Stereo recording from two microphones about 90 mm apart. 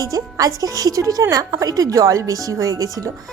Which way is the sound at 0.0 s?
40° right (ahead or behind).